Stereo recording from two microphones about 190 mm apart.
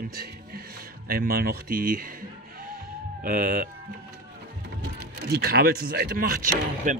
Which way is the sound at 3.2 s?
50° right (ahead or behind).